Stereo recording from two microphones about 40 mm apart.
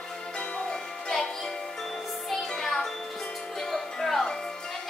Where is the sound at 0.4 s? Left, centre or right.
Centre.